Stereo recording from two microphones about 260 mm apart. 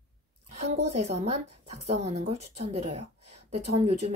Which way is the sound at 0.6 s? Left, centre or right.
Right.